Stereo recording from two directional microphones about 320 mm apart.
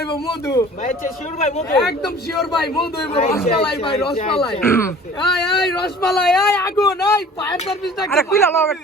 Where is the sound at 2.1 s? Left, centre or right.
Left.